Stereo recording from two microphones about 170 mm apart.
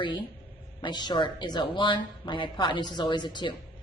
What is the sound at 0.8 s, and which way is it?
A woman's voice, 25° left (ahead or behind).